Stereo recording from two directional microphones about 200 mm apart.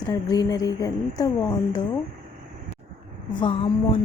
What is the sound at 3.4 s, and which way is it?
Speech, 25° left (ahead or behind).